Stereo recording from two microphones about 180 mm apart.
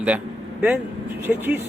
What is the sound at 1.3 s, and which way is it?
Speech, 10° right (ahead or behind).